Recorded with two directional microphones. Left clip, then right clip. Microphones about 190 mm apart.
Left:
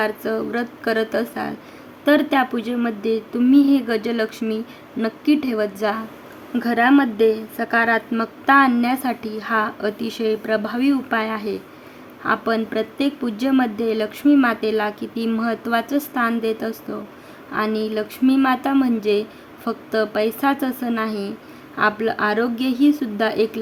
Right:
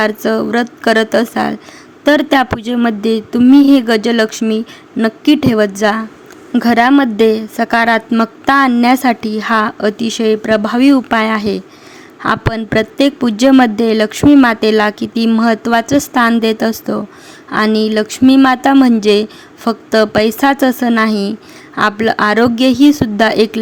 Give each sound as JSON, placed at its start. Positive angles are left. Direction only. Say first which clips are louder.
{"t": 0.0, "sound": "a woman's voice", "louder": "right 8 dB", "side_deg": -40}